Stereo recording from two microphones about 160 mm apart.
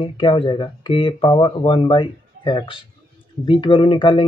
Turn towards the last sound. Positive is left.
turn(degrees=30)  # may be behind; listen again after turning